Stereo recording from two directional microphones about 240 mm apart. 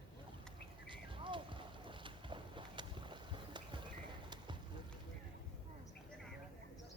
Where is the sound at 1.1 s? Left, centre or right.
Right.